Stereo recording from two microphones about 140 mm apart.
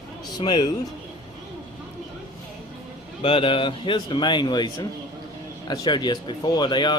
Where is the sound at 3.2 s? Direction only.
40° left (ahead or behind).